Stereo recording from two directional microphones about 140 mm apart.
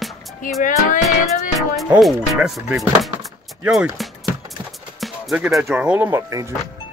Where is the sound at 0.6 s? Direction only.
70° left (ahead or behind).